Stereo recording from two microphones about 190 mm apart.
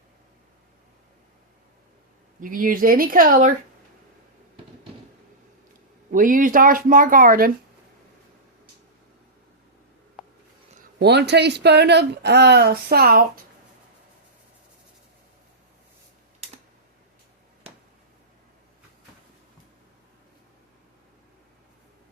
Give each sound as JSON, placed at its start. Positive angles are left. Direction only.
{"t": 2.4, "sound": "speech", "side_deg": -45}
{"t": 6.1, "sound": "speech", "side_deg": -45}
{"t": 10.2, "sound": "writing", "side_deg": -5}
{"t": 11.0, "sound": "speech", "side_deg": -60}